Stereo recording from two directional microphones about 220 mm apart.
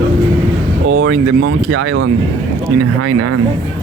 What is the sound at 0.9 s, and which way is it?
Speech, 65° right (ahead or behind).